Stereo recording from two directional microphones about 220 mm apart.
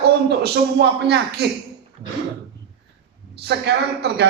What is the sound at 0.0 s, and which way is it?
Speech, 50° right (ahead or behind).